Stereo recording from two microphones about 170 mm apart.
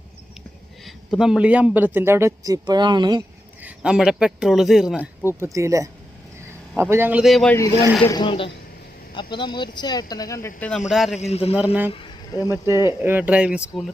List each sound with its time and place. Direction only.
0.9 s speech: centre (ahead or behind); by 3.2 s 25° right (ahead or behind)
3.6 s a man's voice: 5° right (ahead or behind)
5.3 s speech: 15° right (ahead or behind); by 7.5 s centre (ahead or behind)
8.0 s speech: 25° left (ahead or behind)
10.7 s a man's voice: centre (ahead or behind)
11.2 s a man's voice: 35° left (ahead or behind)
11.5 s speech: 10° right (ahead or behind)
11.9 s vehicle: 30° left (ahead or behind)
12.5 s speech: 15° right (ahead or behind)